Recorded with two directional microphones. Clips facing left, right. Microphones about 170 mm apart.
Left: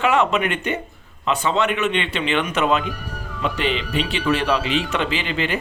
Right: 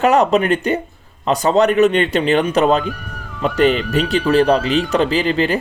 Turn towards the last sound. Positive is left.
turn(degrees=-40)  # may be behind; listen again after turning